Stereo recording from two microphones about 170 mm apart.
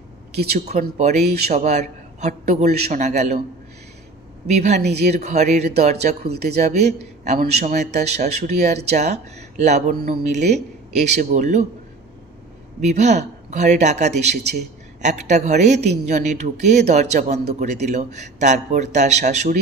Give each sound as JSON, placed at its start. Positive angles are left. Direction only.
{"t": 0.7, "sound": "speech", "side_deg": -45}
{"t": 4.5, "sound": "speech", "side_deg": -40}
{"t": 12.8, "sound": "speech", "side_deg": -40}